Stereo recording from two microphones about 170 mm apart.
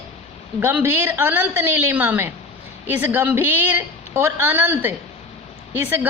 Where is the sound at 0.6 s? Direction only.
15° right (ahead or behind).